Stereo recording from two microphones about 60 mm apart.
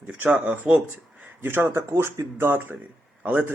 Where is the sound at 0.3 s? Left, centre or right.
Centre.